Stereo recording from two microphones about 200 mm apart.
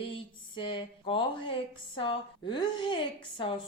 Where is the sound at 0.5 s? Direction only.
25° left (ahead or behind).